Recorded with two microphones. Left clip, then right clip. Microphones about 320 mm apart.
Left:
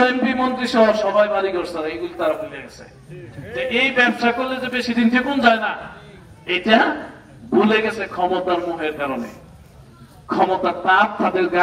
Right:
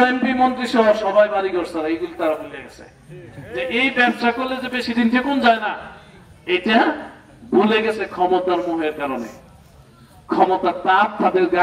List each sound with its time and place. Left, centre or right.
0.0 s a man's voice: right
10.3 s a man's voice: right